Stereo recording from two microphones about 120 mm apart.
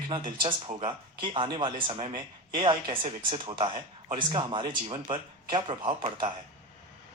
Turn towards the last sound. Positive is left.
turn(degrees=-40)  # may be behind; listen again after turning